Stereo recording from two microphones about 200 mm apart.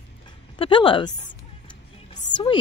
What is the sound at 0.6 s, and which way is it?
Speech, 25° left (ahead or behind).